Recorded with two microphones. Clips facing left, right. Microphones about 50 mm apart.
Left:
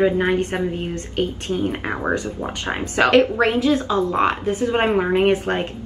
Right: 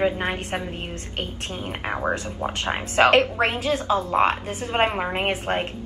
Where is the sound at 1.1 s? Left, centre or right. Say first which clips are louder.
Left 10 dB; right.